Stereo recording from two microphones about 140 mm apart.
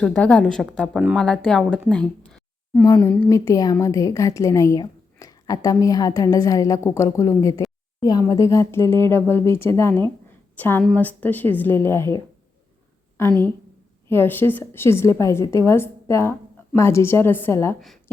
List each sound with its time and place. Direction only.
0.0 s a woman's voice: 10° left (ahead or behind)
1.9 s a sound: 5° left (ahead or behind)
2.8 s a woman's voice: 30° left (ahead or behind)
17.7 s a woman's voice: centre (ahead or behind)